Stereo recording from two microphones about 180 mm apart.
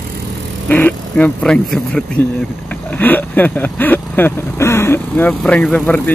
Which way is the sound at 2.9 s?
10° left (ahead or behind).